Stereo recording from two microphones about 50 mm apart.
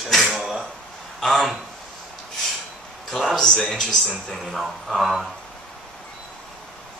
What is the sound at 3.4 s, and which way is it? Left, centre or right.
Speech, centre.